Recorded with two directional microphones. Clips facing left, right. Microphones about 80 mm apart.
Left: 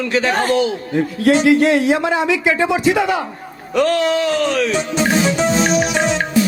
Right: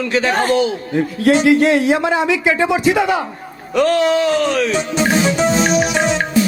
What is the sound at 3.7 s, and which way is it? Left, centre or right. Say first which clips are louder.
Music: right 2 dB; centre.